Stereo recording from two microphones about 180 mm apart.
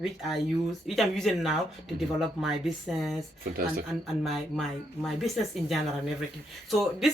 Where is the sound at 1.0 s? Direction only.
Centre (ahead or behind).